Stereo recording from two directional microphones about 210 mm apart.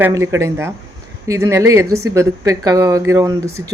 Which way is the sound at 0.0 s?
15° right (ahead or behind).